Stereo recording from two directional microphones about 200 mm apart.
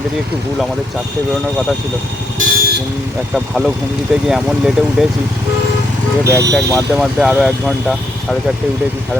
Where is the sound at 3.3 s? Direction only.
Centre (ahead or behind).